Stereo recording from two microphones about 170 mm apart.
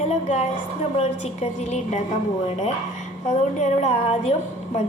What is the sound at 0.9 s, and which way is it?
A woman's voice, 40° left (ahead or behind).